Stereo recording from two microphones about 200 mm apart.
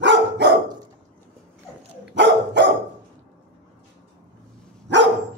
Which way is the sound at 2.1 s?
60° right (ahead or behind).